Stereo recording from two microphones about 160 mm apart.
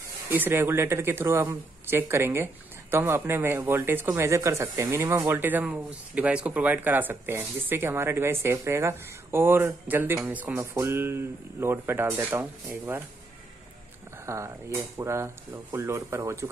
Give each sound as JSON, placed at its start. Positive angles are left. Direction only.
{"t": 0.3, "sound": "speech", "side_deg": -15}
{"t": 14.1, "sound": "a sound", "side_deg": -15}
{"t": 15.0, "sound": "speech", "side_deg": -15}